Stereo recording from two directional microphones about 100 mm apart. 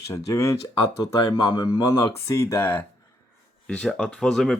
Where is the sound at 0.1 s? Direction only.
30° left (ahead or behind).